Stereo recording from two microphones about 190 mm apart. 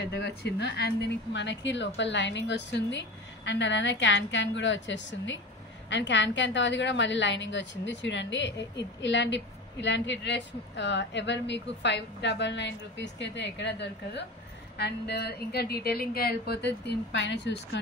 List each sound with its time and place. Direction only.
0.0 s a woman's voice: 65° left (ahead or behind)